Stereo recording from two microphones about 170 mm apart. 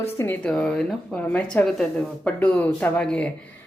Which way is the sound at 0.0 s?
15° left (ahead or behind).